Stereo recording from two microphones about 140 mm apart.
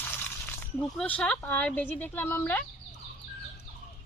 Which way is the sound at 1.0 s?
5° left (ahead or behind).